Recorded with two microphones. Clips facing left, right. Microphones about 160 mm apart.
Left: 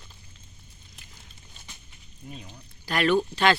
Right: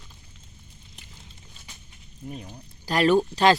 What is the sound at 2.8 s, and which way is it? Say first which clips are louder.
Speech: right 3 dB; 35° right (ahead or behind).